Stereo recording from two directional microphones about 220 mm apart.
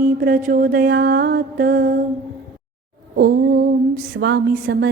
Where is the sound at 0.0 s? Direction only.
40° right (ahead or behind).